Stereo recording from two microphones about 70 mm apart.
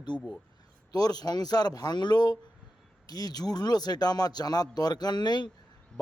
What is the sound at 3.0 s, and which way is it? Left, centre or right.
Speech, left.